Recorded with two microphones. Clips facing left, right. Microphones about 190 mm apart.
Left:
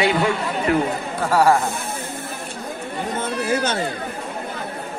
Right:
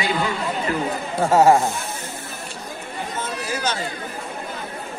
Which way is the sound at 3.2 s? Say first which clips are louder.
Left 5 dB; 60° left (ahead or behind).